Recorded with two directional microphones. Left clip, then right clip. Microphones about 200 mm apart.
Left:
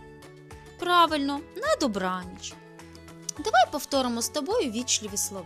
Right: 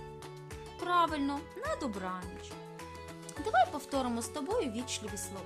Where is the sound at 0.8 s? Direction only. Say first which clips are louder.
Left 8 dB; 20° left (ahead or behind).